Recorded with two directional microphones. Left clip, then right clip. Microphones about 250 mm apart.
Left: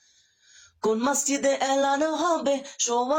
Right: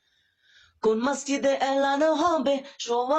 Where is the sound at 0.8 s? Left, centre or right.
Centre.